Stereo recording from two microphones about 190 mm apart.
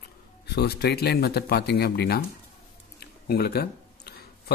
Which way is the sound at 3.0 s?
55° left (ahead or behind).